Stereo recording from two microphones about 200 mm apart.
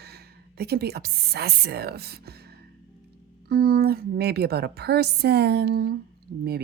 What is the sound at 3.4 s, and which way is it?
A woman's voice, 50° right (ahead or behind).